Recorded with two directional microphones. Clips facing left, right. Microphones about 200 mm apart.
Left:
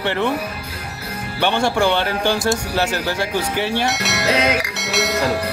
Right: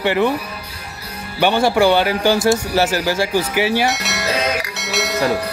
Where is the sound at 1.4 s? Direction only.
5° right (ahead or behind).